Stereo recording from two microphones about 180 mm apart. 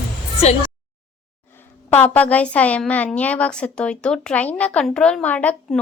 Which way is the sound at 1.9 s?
10° left (ahead or behind).